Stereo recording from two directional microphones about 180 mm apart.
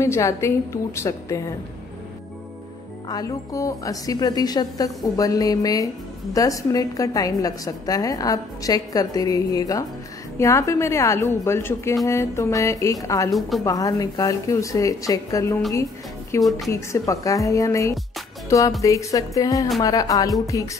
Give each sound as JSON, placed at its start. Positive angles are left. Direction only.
{"t": 0.0, "sound": "a woman's voice", "side_deg": 15}
{"t": 3.1, "sound": "a woman's voice", "side_deg": 20}
{"t": 16.4, "sound": "a woman's voice", "side_deg": 0}
{"t": 16.7, "sound": "a woman's voice", "side_deg": 15}